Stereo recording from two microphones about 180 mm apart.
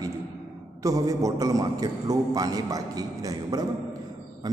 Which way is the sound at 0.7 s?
20° right (ahead or behind).